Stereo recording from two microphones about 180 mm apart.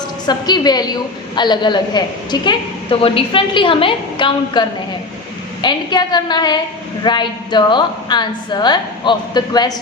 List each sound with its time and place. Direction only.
0.3 s a woman's voice: 25° left (ahead or behind)
5.6 s a woman's voice: 25° left (ahead or behind)